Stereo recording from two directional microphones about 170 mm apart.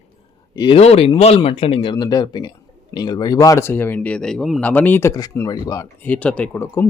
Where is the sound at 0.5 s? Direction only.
25° left (ahead or behind).